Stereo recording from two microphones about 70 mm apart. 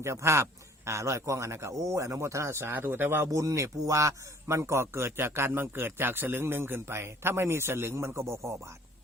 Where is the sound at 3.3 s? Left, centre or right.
Right.